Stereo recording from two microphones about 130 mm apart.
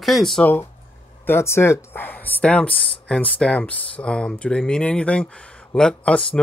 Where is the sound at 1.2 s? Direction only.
20° left (ahead or behind).